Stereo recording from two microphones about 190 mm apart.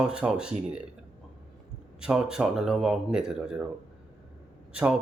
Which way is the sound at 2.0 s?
5° right (ahead or behind).